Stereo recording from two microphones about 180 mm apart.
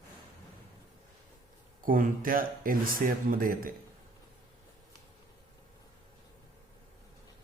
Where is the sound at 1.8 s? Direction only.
50° right (ahead or behind).